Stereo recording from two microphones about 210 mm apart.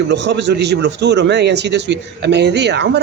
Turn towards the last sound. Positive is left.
turn(degrees=-55)  # may be behind; listen again after turning